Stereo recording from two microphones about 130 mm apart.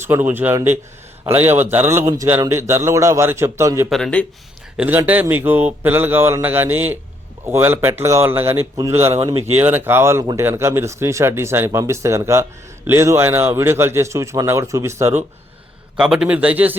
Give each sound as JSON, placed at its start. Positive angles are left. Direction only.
{"t": 0.0, "sound": "speech", "side_deg": -15}
{"t": 3.8, "sound": "speech", "side_deg": 5}
{"t": 4.8, "sound": "speech", "side_deg": -15}
{"t": 16.0, "sound": "speech", "side_deg": -5}